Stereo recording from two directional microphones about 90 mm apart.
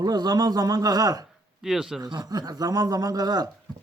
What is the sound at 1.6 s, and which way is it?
Speech, 5° right (ahead or behind).